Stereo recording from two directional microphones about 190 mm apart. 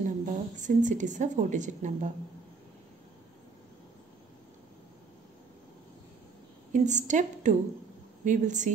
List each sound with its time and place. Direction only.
0.0 s a woman's voice: 40° right (ahead or behind)
6.7 s a woman's voice: 40° right (ahead or behind)